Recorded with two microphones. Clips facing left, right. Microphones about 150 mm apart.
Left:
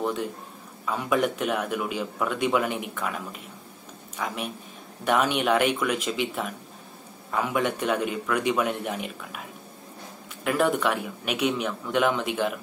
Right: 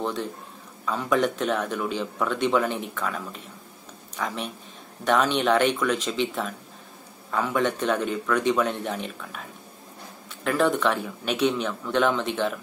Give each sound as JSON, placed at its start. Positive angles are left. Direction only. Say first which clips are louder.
{"t": 0.0, "sound": "a man's voice", "louder": "left 1 dB", "side_deg": 10}
{"t": 10.4, "sound": "a man's voice", "louder": "right 1 dB", "side_deg": 10}